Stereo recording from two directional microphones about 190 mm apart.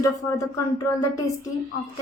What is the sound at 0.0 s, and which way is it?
Speech, 15° left (ahead or behind).